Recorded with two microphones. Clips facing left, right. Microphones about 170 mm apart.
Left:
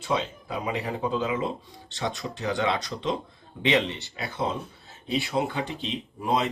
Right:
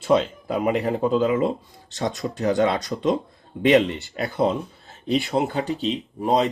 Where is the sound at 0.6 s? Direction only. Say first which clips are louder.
Right 8 dB; 50° right (ahead or behind).